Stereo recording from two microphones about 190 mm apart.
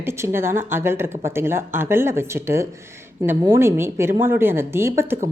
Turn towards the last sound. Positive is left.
turn(degrees=-15)  # may be behind; listen again after turning